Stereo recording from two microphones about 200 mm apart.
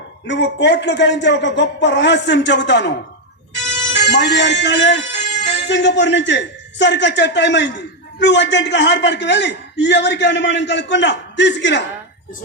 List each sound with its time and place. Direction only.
0.3 s a man's voice: 60° left (ahead or behind)
4.0 s a man's voice: 60° left (ahead or behind)